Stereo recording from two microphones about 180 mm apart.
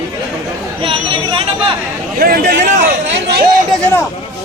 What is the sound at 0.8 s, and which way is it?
Speech, 30° right (ahead or behind).